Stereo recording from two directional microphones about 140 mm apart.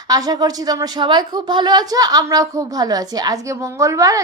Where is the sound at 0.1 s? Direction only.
25° right (ahead or behind).